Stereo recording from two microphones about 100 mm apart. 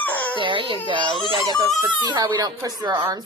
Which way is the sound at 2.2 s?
45° right (ahead or behind).